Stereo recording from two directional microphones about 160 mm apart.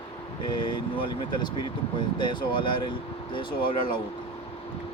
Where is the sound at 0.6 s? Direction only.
30° left (ahead or behind).